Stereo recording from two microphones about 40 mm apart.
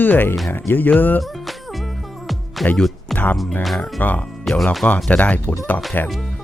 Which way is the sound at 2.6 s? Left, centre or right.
Centre.